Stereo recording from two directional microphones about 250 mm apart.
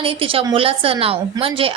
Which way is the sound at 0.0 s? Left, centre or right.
Right.